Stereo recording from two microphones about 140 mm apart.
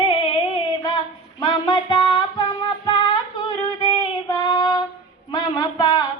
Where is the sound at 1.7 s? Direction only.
30° left (ahead or behind).